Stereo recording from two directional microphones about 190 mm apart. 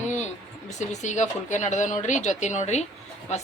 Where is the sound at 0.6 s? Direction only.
40° left (ahead or behind).